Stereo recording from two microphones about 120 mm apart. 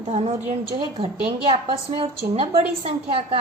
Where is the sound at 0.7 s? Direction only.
55° right (ahead or behind).